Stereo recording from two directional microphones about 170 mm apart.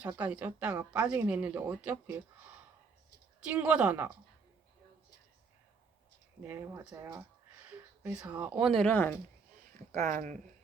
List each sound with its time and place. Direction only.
0.0 s speech: 10° right (ahead or behind)
3.4 s speech: 5° right (ahead or behind)
6.4 s speech: 10° right (ahead or behind); by 9.1 s 10° left (ahead or behind)
10.0 s speech: 45° right (ahead or behind)